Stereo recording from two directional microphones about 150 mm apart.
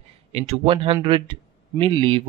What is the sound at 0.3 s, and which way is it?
Speech, 40° right (ahead or behind).